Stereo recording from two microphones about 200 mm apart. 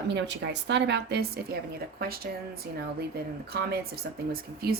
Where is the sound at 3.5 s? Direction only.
50° right (ahead or behind).